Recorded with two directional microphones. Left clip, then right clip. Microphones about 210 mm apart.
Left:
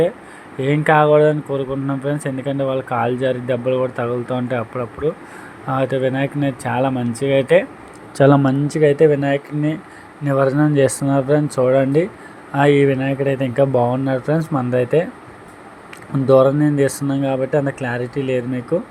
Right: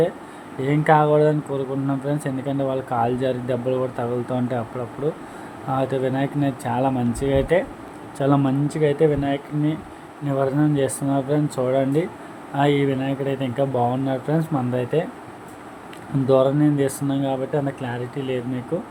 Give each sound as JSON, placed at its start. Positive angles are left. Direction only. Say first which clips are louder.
{"t": 0.6, "sound": "speech", "louder": "left 3 dB", "side_deg": 10}
{"t": 5.6, "sound": "speech", "louder": "left 4 dB", "side_deg": 10}
{"t": 8.2, "sound": "speech", "louder": "left 7 dB", "side_deg": 20}
{"t": 16.2, "sound": "speech", "louder": "left 5 dB", "side_deg": 15}